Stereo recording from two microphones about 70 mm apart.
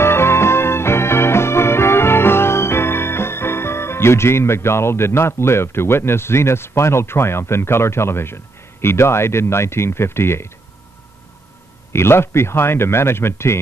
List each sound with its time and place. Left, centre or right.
0.0 s music: left
8.8 s speech: left
11.9 s speech: left